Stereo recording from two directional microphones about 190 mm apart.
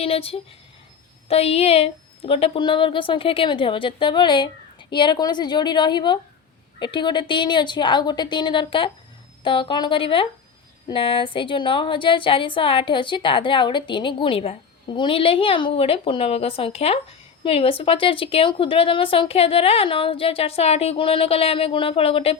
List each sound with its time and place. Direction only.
0.0 s a woman's voice: 30° left (ahead or behind)